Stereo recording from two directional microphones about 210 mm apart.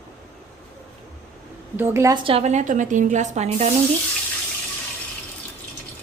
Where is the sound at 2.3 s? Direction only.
30° right (ahead or behind).